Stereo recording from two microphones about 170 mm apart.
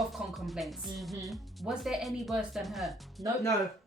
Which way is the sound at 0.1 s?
Centre (ahead or behind).